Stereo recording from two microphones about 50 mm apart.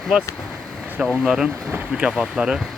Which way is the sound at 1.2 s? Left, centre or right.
Centre.